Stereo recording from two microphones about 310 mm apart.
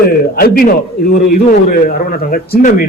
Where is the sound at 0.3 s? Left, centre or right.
Left.